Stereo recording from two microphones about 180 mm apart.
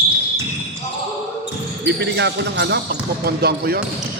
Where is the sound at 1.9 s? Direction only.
70° right (ahead or behind).